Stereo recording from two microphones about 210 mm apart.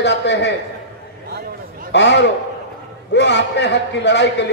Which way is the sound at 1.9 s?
55° left (ahead or behind).